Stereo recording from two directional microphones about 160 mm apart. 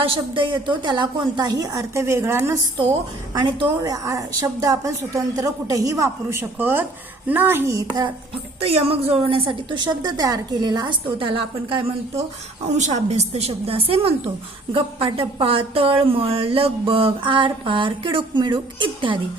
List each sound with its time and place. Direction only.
0.0 s a woman's voice: 35° right (ahead or behind); by 2.6 s 15° right (ahead or behind)
3.4 s a woman's voice: 25° right (ahead or behind)
8.6 s a woman's voice: 40° right (ahead or behind)
12.6 s a woman's voice: 45° right (ahead or behind)